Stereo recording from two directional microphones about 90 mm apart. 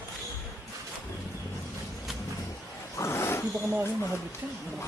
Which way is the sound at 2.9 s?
30° left (ahead or behind).